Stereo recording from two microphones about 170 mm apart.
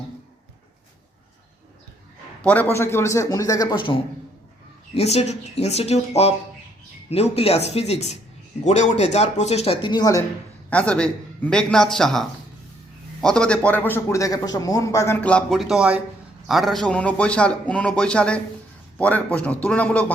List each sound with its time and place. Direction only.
2.4 s a man's voice: 10° left (ahead or behind)
10.7 s a man's voice: 5° left (ahead or behind)
13.2 s speech: 5° left (ahead or behind)